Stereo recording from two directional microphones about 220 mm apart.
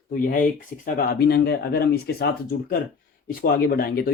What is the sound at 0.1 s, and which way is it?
Speech, 40° left (ahead or behind).